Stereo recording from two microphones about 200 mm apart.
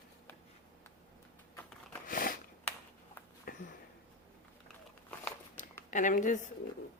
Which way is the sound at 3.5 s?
45° left (ahead or behind).